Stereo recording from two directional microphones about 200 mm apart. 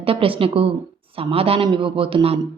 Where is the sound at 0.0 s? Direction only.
25° right (ahead or behind).